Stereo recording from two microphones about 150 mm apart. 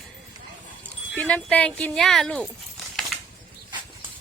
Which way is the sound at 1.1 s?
10° left (ahead or behind).